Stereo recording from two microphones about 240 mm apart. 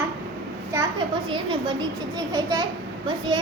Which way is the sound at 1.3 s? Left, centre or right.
Right.